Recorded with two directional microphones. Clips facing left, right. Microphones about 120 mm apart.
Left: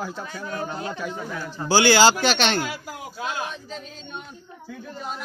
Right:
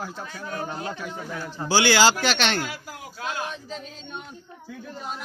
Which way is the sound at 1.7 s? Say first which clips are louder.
Left 3 dB; 35° left (ahead or behind).